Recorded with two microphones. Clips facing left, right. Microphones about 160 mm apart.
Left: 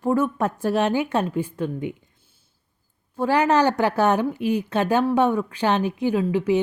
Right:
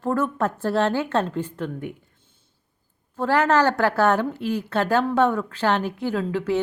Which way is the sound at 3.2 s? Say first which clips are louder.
Left 1 dB; 15° left (ahead or behind).